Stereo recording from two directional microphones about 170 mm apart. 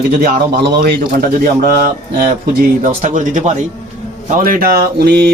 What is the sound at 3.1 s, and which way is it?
Speech, 45° right (ahead or behind).